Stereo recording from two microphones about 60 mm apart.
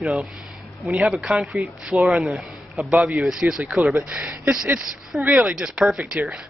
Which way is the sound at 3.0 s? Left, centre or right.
Centre.